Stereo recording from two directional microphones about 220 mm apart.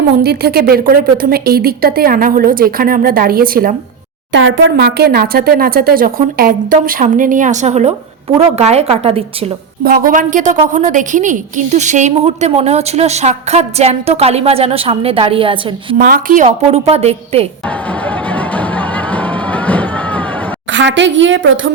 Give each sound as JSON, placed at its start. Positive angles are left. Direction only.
{"t": 0.2, "sound": "speech", "side_deg": -45}
{"t": 4.3, "sound": "a woman's voice", "side_deg": -55}
{"t": 9.8, "sound": "a woman's voice", "side_deg": -40}
{"t": 16.0, "sound": "a woman's voice", "side_deg": -40}
{"t": 17.7, "sound": "music", "side_deg": 5}
{"t": 20.7, "sound": "a woman's voice", "side_deg": -55}